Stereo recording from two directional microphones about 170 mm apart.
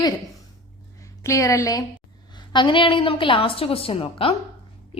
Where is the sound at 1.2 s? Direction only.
20° left (ahead or behind).